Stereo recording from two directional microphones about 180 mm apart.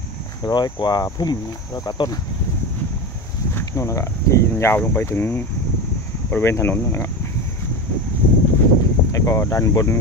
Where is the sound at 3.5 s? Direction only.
15° left (ahead or behind).